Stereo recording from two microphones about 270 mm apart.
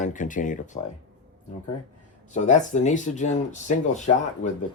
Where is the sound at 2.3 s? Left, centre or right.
Left.